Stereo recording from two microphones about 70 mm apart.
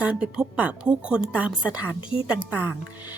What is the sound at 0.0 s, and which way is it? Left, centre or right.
A woman's voice, centre.